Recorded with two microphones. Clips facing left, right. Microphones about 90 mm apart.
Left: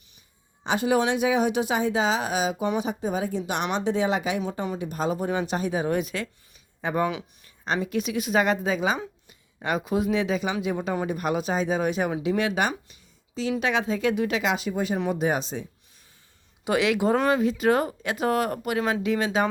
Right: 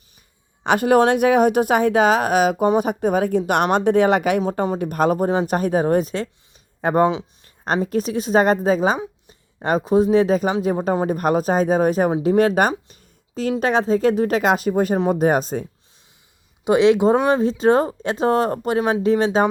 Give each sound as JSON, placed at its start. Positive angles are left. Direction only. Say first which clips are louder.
{"t": 0.6, "sound": "speech", "louder": "right 8 dB", "side_deg": -60}
{"t": 4.8, "sound": "speech", "louder": "right 9 dB", "side_deg": -55}
{"t": 7.4, "sound": "a woman's voice", "louder": "right 5 dB", "side_deg": -45}
{"t": 16.6, "sound": "a woman's voice", "louder": "right 8 dB", "side_deg": -25}
{"t": 18.8, "sound": "speech", "louder": "right 5 dB", "side_deg": -20}
{"t": 19.0, "sound": "a woman's voice", "louder": "right 9 dB", "side_deg": -35}